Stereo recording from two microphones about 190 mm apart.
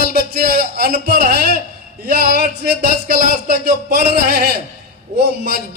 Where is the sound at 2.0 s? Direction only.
55° right (ahead or behind).